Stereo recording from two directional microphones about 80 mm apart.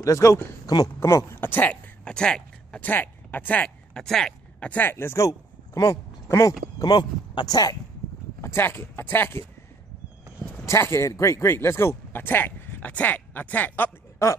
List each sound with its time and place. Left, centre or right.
0.0 s speech: left
2.0 s a sound: centre
2.8 s speech: left
3.9 s a sound: centre
4.6 s speech: left
6.8 s speech: left
8.4 s speech: left
10.6 s speech: left
14.2 s speech: left